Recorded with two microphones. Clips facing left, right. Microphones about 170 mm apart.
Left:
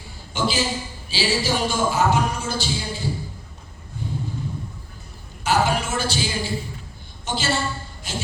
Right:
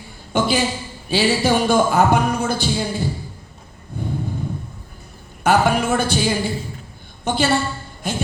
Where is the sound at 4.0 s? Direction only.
55° right (ahead or behind).